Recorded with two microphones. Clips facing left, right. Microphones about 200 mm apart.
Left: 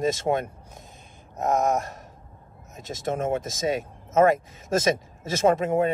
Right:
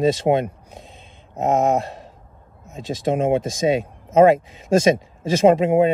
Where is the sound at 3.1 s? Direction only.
15° right (ahead or behind).